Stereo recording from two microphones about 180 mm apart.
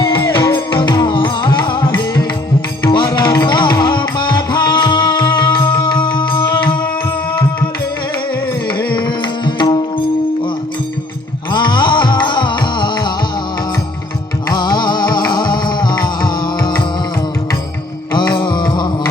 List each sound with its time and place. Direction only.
0.0 s music: 25° left (ahead or behind)
8.9 s music: 25° left (ahead or behind)
11.5 s music: 25° left (ahead or behind)
14.5 s music: 25° left (ahead or behind)
18.1 s music: 25° left (ahead or behind)